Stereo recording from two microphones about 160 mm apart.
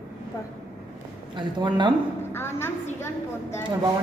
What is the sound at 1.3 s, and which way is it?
Speech, 30° right (ahead or behind).